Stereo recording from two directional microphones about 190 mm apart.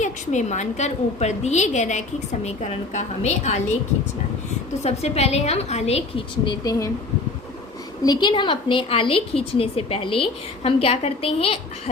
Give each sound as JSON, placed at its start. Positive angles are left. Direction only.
{"t": 0.0, "sound": "a woman's voice", "side_deg": 40}
{"t": 4.8, "sound": "a woman's voice", "side_deg": 35}
{"t": 8.0, "sound": "a woman's voice", "side_deg": 25}